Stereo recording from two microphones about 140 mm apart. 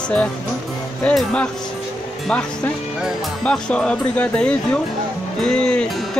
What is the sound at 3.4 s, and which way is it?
Speech, 5° left (ahead or behind).